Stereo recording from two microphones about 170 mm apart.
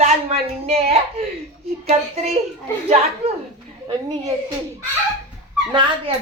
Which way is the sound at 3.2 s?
35° right (ahead or behind).